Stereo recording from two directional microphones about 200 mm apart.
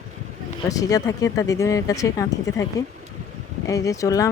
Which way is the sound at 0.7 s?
15° left (ahead or behind).